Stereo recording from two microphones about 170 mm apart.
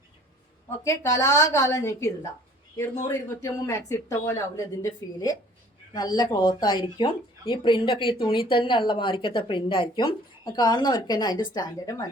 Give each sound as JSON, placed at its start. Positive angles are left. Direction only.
{"t": 0.9, "sound": "speech", "side_deg": 20}
{"t": 3.1, "sound": "speech", "side_deg": 20}